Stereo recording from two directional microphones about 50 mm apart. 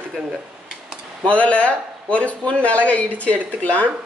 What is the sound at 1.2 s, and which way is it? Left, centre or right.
Speech, left.